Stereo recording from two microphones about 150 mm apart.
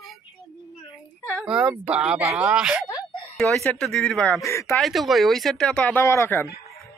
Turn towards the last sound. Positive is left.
turn(degrees=15)  # may be behind; listen again after turning